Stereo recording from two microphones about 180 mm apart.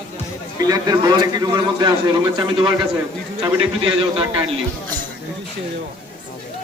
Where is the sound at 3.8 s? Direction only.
30° right (ahead or behind).